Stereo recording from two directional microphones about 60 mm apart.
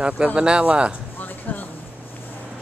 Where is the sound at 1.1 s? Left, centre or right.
Left.